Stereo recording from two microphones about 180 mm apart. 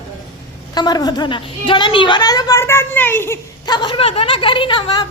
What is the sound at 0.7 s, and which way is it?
A woman's voice, 20° left (ahead or behind).